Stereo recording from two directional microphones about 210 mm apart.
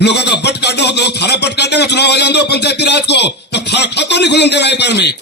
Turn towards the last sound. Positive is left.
turn(degrees=55)  # may be behind; listen again after turning